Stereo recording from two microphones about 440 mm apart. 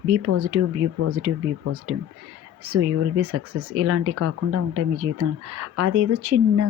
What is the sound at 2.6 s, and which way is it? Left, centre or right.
Speech, right.